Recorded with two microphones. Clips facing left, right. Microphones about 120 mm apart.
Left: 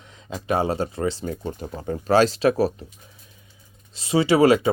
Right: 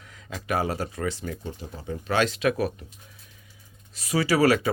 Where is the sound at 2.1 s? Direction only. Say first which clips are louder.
Left 6 dB; 35° left (ahead or behind).